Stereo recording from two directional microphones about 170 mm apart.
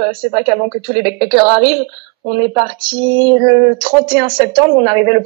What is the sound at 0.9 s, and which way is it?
Speech, 25° right (ahead or behind).